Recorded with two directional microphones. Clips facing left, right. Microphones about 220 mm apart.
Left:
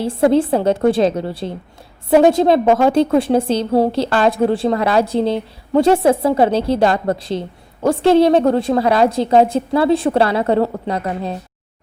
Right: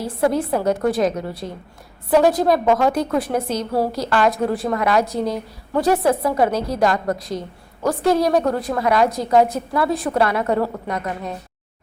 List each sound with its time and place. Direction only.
0.0 s a woman's voice: 25° left (ahead or behind)